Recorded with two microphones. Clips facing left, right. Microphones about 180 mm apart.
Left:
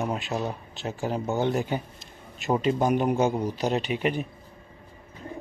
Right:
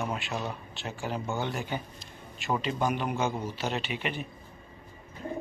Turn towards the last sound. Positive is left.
turn(degrees=45)  # may be behind; listen again after turning